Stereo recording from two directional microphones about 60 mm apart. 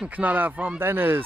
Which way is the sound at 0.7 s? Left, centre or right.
Right.